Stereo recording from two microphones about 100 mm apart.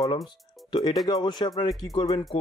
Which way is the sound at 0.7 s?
45° left (ahead or behind).